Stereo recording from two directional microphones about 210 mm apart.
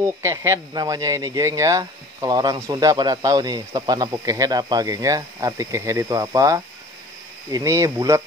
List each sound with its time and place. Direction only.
0.0 s speech: 15° right (ahead or behind)